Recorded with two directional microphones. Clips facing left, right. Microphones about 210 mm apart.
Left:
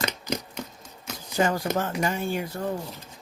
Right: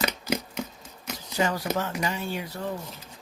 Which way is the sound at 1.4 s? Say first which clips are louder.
Left 2 dB; 50° left (ahead or behind).